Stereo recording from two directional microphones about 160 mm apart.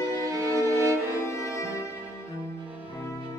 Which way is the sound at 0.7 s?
20° right (ahead or behind).